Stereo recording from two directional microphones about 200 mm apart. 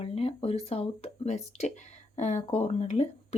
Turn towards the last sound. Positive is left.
turn(degrees=30)  # may be behind; listen again after turning